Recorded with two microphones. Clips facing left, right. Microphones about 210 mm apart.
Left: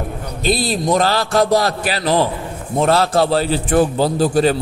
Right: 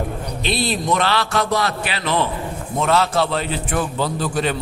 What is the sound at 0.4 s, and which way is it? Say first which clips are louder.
A man's voice: left 4 dB; 40° left (ahead or behind).